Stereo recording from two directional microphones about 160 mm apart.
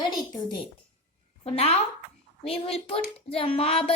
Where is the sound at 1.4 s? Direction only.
40° left (ahead or behind).